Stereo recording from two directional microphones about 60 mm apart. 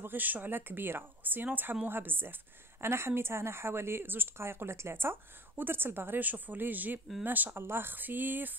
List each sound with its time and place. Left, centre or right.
0.0 s a woman's voice: right